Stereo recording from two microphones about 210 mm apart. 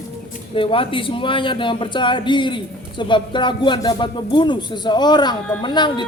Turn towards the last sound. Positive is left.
turn(degrees=20)  # may be behind; listen again after turning